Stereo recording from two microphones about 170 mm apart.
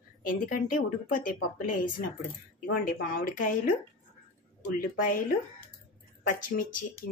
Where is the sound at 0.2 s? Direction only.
55° left (ahead or behind).